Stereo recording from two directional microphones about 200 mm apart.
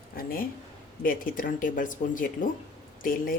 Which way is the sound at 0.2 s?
50° left (ahead or behind).